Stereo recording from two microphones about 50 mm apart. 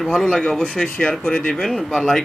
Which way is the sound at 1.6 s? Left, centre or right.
Centre.